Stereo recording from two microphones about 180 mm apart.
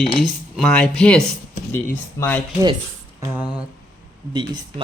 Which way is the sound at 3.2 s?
5° right (ahead or behind).